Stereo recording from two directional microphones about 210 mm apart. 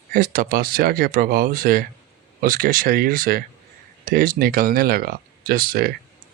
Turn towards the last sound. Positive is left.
turn(degrees=-45)  # may be behind; listen again after turning